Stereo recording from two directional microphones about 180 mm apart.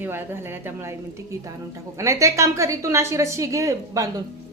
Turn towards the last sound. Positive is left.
turn(degrees=-20)  # may be behind; listen again after turning